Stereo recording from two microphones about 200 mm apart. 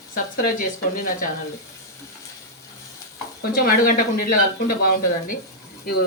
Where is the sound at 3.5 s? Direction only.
50° left (ahead or behind).